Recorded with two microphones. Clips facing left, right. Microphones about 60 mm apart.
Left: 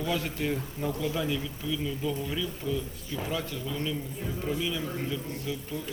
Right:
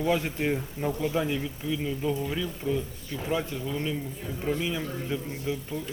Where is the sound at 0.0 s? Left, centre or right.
Right.